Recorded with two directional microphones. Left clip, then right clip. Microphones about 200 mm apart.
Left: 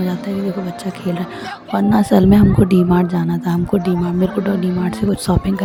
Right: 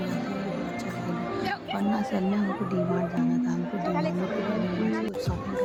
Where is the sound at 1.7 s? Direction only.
50° left (ahead or behind).